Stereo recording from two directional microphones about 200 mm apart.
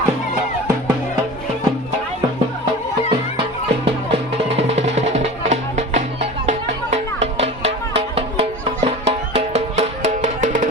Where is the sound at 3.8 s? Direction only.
30° right (ahead or behind).